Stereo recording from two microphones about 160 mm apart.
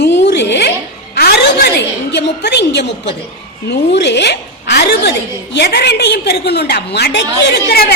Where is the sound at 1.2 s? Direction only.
80° left.